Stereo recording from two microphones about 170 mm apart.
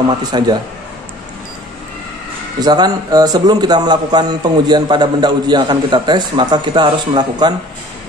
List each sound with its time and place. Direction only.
0.2 s a man's voice: 25° right (ahead or behind)
2.6 s a man's voice: 25° right (ahead or behind)